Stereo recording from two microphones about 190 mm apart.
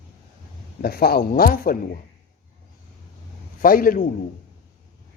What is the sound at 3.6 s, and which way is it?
Speech, 45° left (ahead or behind).